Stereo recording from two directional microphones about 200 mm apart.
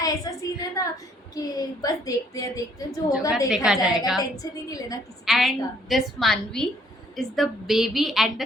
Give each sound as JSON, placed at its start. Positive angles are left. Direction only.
{"t": 0.0, "sound": "a sound", "side_deg": 15}
{"t": 1.4, "sound": "a woman's voice", "side_deg": 20}
{"t": 3.1, "sound": "a woman's voice", "side_deg": -5}
{"t": 4.7, "sound": "a woman's voice", "side_deg": 15}
{"t": 5.2, "sound": "a woman's voice", "side_deg": 0}